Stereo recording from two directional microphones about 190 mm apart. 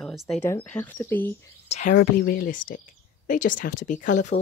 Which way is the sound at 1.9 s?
50° left (ahead or behind).